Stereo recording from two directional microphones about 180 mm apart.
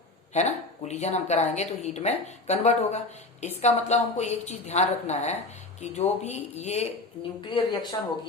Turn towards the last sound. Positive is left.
turn(degrees=25)  # may be behind; listen again after turning